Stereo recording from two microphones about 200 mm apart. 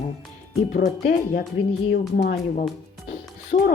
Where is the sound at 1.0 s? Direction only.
45° left (ahead or behind).